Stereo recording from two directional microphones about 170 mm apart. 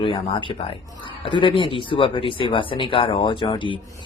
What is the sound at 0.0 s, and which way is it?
Speech, 30° left (ahead or behind).